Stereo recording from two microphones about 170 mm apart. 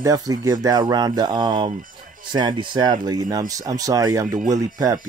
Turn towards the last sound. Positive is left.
turn(degrees=-20)  # may be behind; listen again after turning